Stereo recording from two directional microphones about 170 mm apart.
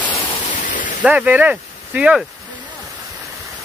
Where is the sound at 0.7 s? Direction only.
50° left (ahead or behind).